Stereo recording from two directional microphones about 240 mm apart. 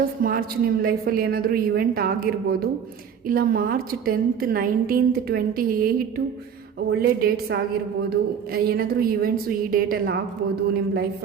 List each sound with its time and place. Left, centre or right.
0.2 s a woman's voice: right